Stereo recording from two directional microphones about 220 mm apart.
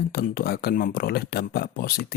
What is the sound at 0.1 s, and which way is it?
Speech, 45° left (ahead or behind).